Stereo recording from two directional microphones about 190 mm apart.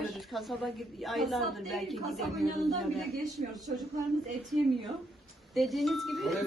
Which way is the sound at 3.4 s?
40° right (ahead or behind).